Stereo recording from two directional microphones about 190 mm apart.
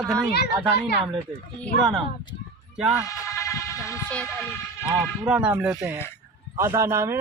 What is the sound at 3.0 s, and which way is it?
Speech, 15° left (ahead or behind).